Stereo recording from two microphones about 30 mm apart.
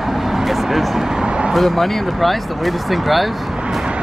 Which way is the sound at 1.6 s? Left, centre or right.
Centre.